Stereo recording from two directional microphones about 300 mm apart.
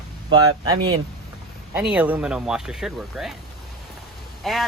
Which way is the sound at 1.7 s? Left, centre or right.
Centre.